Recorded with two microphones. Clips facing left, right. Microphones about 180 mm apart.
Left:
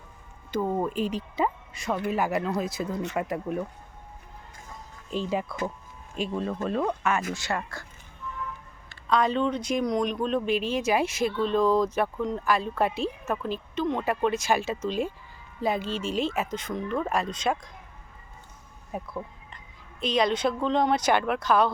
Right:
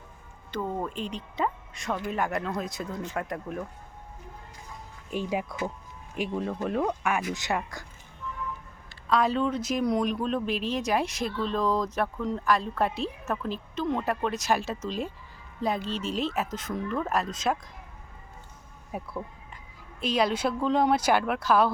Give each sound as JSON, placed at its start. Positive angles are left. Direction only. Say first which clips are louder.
{"t": 0.5, "sound": "speech", "louder": "left 5 dB", "side_deg": 10}
{"t": 5.1, "sound": "speech", "louder": "left 1 dB", "side_deg": -10}
{"t": 9.0, "sound": "speech", "louder": "left 1 dB", "side_deg": -5}
{"t": 18.9, "sound": "speech", "louder": "left 1 dB", "side_deg": -10}